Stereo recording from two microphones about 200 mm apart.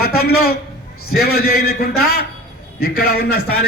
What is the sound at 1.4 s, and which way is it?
A man's voice, 50° left (ahead or behind).